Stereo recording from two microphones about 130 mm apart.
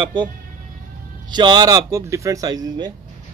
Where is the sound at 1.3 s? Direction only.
35° right (ahead or behind).